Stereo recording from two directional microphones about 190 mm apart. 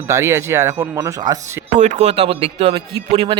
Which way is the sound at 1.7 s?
40° right (ahead or behind).